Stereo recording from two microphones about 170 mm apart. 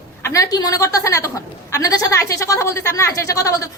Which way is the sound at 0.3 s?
20° left (ahead or behind).